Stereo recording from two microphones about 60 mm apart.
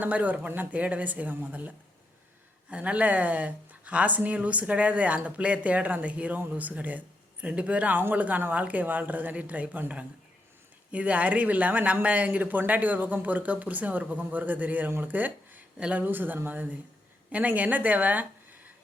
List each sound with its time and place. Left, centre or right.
0.0 s a woman's voice: right
10.9 s a woman's voice: right
16.0 s a woman's voice: right